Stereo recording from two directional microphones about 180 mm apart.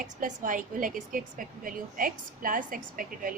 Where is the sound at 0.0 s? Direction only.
50° right (ahead or behind).